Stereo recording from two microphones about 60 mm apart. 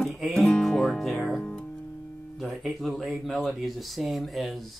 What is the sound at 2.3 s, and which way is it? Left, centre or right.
Speech, centre.